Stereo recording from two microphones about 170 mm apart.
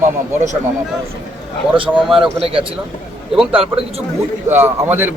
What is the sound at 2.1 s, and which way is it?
A man's voice, 30° right (ahead or behind).